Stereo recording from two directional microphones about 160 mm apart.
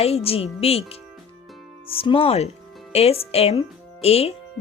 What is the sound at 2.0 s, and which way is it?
Speech, 35° left (ahead or behind).